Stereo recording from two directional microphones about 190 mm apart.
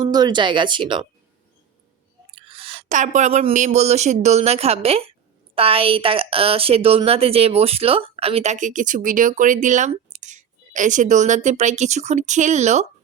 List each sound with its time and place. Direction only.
0.0 s speech: 20° right (ahead or behind)
2.3 s a woman's voice: 30° right (ahead or behind)